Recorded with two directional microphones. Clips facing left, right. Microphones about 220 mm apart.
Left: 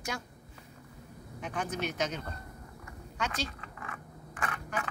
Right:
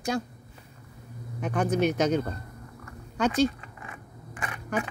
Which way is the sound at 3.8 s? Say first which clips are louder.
Right 1 dB; 15° right (ahead or behind).